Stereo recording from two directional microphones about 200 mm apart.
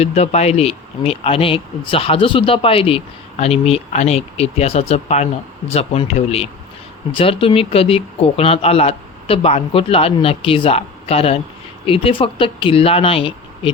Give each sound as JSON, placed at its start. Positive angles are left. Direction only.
{"t": 0.0, "sound": "speech", "side_deg": 35}